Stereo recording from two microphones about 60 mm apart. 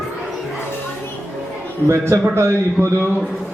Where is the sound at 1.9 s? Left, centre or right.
Right.